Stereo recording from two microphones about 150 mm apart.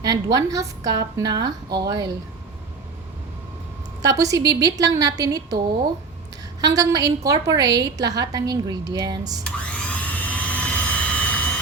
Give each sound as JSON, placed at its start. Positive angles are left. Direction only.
{"t": 0.0, "sound": "a woman's voice", "side_deg": -25}
{"t": 4.0, "sound": "a woman's voice", "side_deg": -25}
{"t": 6.6, "sound": "a woman's voice", "side_deg": -25}
{"t": 9.4, "sound": "vacuum cleaner", "side_deg": 10}